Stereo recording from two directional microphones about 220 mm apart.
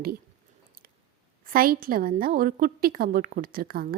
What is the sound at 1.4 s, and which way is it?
A woman's voice, 40° right (ahead or behind).